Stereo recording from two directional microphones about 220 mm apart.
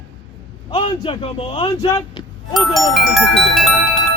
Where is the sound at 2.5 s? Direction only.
Centre (ahead or behind).